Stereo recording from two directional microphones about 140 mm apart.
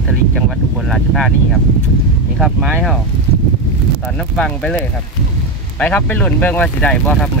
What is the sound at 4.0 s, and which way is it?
Speech, 5° left (ahead or behind).